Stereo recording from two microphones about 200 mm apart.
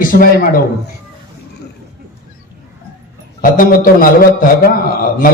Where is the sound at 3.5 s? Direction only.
45° left (ahead or behind).